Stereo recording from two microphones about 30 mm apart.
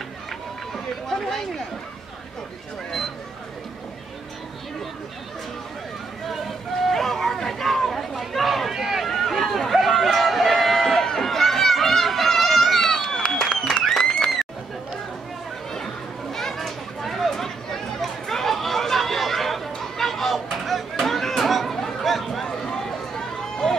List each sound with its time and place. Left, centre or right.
6.2 s speech: centre
6.7 s chatter: centre
8.7 s run: centre
9.0 s run: centre
11.2 s a sound: centre
13.7 s applause: centre
15.7 s children playing: centre
16.5 s chatter: centre
22.0 s a sound: centre
22.4 s run: centre